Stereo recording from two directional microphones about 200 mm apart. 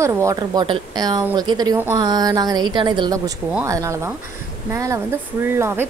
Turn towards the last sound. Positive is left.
turn(degrees=-10)  # may be behind; listen again after turning